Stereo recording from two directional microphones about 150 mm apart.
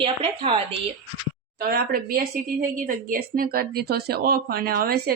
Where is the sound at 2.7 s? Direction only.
70° right (ahead or behind); by 5.1 s 85° right.